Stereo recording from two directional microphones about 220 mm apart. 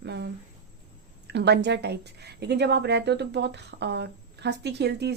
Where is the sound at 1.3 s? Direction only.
50° right (ahead or behind).